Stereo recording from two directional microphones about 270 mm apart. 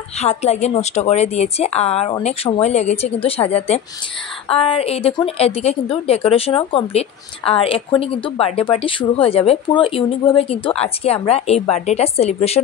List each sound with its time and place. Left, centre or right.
0.2 s a woman's voice: left